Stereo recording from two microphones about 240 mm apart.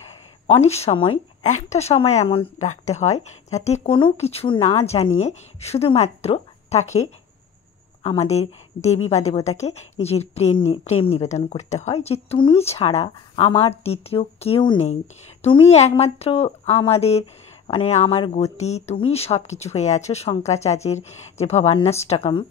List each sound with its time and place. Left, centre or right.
0.5 s a woman's voice: left